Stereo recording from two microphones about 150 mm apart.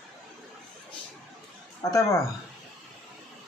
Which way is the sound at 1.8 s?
20° left (ahead or behind).